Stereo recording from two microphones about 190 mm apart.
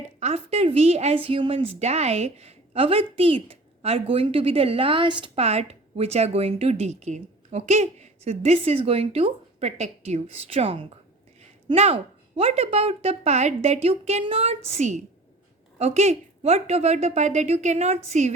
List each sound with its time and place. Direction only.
0.2 s a woman's voice: 35° right (ahead or behind)